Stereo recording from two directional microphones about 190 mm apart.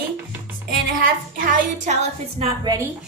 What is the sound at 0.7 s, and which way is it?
Speech, 45° right (ahead or behind).